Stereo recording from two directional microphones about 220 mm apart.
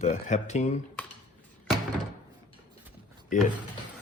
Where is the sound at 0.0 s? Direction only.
30° left (ahead or behind).